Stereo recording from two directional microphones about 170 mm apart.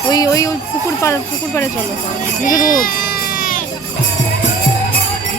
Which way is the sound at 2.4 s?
50° left (ahead or behind).